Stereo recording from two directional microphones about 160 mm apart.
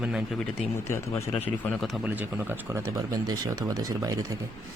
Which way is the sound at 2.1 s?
10° right (ahead or behind).